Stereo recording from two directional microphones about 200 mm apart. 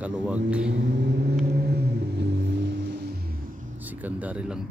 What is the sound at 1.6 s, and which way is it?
Music, 55° right (ahead or behind).